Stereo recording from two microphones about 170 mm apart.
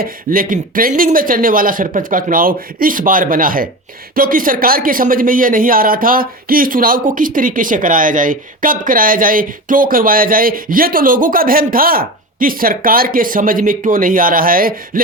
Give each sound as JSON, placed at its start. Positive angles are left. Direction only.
{"t": 0.0, "sound": "speech", "side_deg": -55}